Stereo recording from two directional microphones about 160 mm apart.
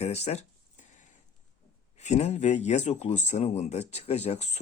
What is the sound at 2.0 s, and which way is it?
Speech, 45° left (ahead or behind).